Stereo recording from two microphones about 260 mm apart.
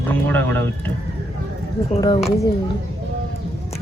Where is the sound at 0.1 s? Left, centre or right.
Centre.